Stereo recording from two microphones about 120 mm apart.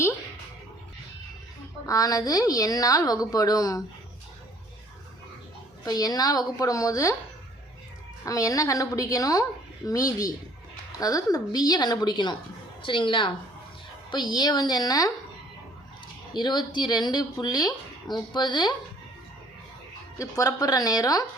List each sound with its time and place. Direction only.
1.9 s a woman's voice: 30° left (ahead or behind)
5.8 s speech: 30° left (ahead or behind)
8.2 s a woman's voice: 30° left (ahead or behind)
16.3 s speech: 35° left (ahead or behind)
20.1 s speech: 30° left (ahead or behind)